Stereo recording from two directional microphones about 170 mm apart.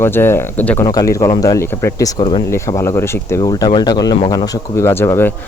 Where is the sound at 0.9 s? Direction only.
20° left (ahead or behind).